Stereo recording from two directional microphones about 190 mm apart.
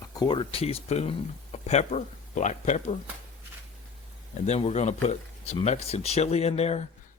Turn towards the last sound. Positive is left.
turn(degrees=35)  # may be behind; listen again after turning